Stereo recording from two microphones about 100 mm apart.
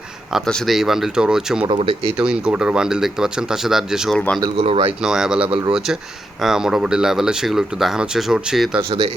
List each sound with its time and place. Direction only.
0.4 s speech: centre (ahead or behind)
4.5 s speech: 70° right (ahead or behind)
5.0 s speech: 5° right (ahead or behind)